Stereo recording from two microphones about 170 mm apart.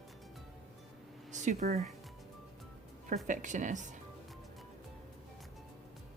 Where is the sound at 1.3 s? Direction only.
45° right (ahead or behind).